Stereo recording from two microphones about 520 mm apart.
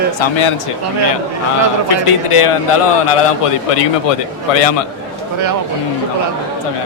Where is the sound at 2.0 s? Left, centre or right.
Left.